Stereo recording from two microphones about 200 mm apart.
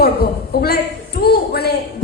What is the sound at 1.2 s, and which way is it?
Speech, 50° left (ahead or behind).